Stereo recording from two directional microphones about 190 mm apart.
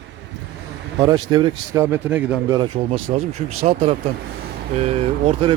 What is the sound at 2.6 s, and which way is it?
Speech, 25° right (ahead or behind).